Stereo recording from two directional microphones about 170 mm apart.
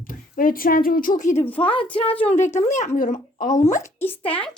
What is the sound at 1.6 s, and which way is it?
Speech, 30° left (ahead or behind).